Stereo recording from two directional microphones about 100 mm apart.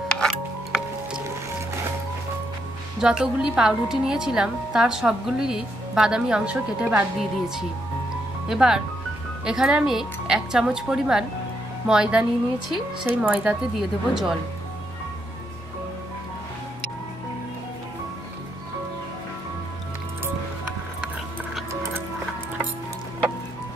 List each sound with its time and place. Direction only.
0.1 s music: 5° left (ahead or behind)
3.0 s a woman's voice: 10° right (ahead or behind)
13.7 s speech: 5° right (ahead or behind)